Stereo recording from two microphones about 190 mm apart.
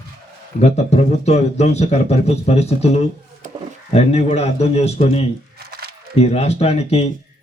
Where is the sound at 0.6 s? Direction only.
35° left (ahead or behind).